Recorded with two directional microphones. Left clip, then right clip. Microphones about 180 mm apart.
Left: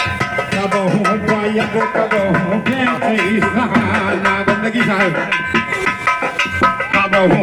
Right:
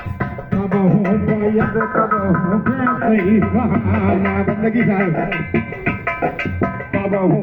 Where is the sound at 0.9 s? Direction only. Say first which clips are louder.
Left 3 dB; 5° left (ahead or behind).